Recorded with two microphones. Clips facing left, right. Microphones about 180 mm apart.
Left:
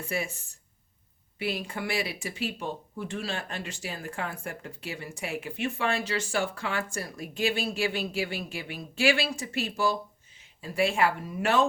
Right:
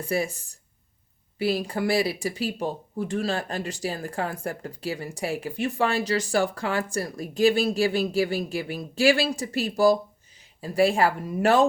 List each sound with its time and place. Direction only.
0.0 s speech: 35° right (ahead or behind)